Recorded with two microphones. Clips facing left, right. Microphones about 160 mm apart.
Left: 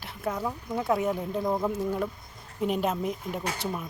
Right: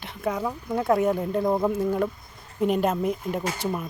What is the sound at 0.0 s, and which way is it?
Speech, 5° left (ahead or behind).